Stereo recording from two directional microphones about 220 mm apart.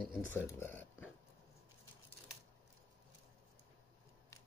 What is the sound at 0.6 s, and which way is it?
Speech, 10° left (ahead or behind).